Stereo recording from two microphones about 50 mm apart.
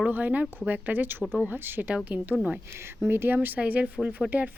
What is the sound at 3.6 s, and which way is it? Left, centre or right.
Speech, right.